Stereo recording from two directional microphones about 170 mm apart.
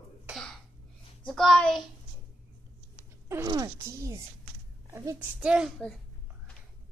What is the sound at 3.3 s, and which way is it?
Speech, 20° right (ahead or behind).